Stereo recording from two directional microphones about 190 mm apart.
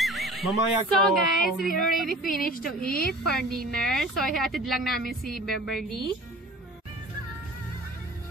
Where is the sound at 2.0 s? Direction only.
45° left (ahead or behind).